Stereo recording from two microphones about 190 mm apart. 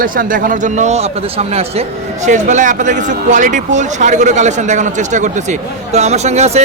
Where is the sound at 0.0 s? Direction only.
45° right (ahead or behind).